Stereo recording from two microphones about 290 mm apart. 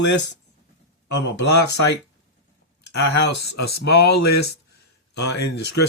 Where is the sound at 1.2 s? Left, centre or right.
Left.